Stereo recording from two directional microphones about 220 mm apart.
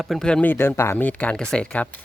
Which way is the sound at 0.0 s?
Centre (ahead or behind).